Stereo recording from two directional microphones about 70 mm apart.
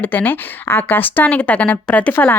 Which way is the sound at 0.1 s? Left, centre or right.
Left.